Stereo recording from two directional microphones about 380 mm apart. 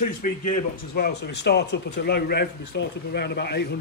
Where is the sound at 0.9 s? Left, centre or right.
Left.